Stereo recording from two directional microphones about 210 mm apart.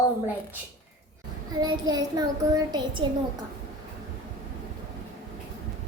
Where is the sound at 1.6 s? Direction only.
20° right (ahead or behind).